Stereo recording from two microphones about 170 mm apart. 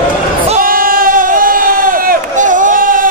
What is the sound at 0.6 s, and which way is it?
Sheep, 55° right (ahead or behind).